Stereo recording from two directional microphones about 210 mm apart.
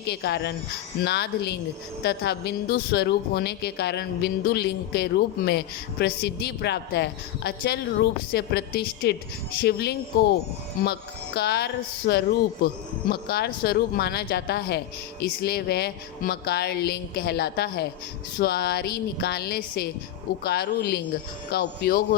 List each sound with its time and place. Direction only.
0.0 s speech: 50° left (ahead or behind)
11.3 s speech: 50° left (ahead or behind)